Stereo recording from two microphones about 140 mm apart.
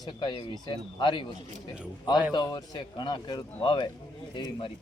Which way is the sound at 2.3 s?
30° left (ahead or behind).